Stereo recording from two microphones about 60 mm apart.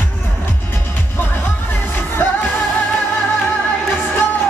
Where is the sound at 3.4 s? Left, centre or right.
Left.